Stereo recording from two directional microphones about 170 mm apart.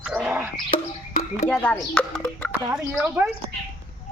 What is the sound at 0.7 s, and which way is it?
Frog, 40° left (ahead or behind).